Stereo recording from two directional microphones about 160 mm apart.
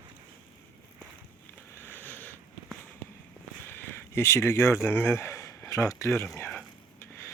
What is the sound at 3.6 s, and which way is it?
Speech, 15° left (ahead or behind).